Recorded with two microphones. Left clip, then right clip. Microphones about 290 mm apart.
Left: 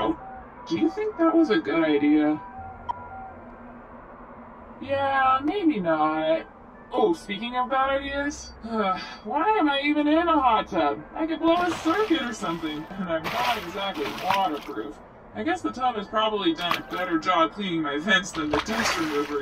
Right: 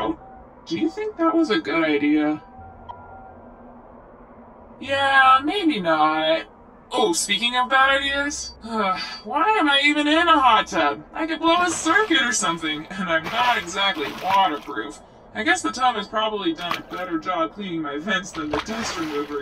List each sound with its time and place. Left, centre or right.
0.7 s speech: centre
4.7 s speech: right
8.2 s speech: right
13.9 s speech: centre
14.4 s speech: right
16.1 s speech: centre